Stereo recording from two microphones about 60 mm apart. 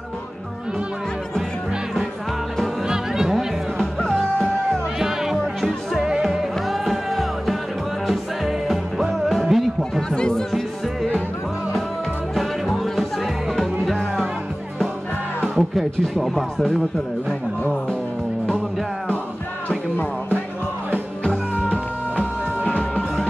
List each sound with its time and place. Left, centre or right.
2.5 s music: centre
3.7 s music: centre
10.1 s music: centre
12.4 s music: centre
15.5 s speech: centre
21.2 s music: centre